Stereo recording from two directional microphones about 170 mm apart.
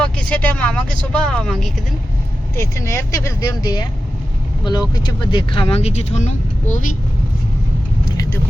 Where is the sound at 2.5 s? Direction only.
20° left (ahead or behind).